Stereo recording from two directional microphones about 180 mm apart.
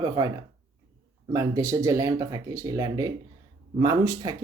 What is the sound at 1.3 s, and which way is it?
Speech, 20° right (ahead or behind).